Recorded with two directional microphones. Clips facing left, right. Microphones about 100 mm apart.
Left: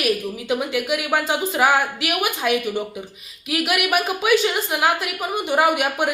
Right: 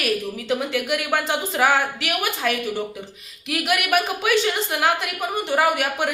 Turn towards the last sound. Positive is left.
turn(degrees=15)  # may be behind; listen again after turning